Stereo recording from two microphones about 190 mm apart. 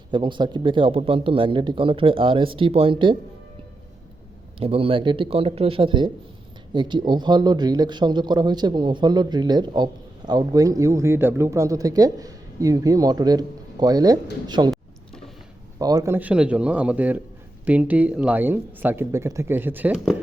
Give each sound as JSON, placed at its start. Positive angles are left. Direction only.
{"t": 0.1, "sound": "speech", "side_deg": -25}
{"t": 4.6, "sound": "speech", "side_deg": -30}
{"t": 15.8, "sound": "speech", "side_deg": -20}